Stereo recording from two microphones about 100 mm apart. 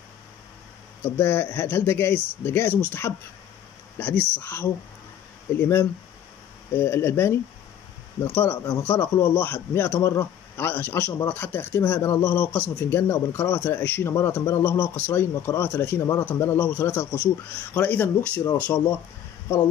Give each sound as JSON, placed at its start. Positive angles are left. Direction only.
{"t": 1.0, "sound": "a man's voice", "side_deg": 25}
{"t": 4.4, "sound": "a man's voice", "side_deg": 25}